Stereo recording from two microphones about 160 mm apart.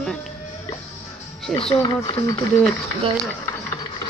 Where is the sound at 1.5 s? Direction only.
35° left (ahead or behind).